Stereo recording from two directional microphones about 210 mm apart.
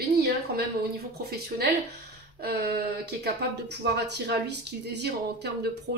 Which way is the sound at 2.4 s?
45° right (ahead or behind).